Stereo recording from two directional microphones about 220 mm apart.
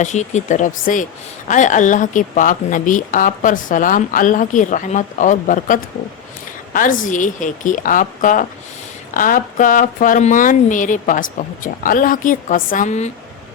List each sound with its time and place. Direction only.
0.0 s a woman's voice: 30° left (ahead or behind)